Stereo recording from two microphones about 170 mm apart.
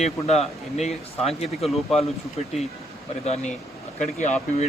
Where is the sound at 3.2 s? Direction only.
40° left (ahead or behind).